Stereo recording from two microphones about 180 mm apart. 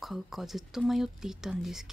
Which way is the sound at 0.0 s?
Centre (ahead or behind).